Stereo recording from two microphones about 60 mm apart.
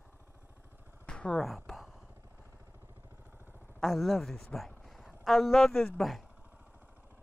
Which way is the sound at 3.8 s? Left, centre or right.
Centre.